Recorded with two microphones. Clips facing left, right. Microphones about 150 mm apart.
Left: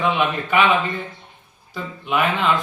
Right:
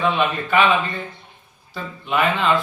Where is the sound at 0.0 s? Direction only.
15° left (ahead or behind).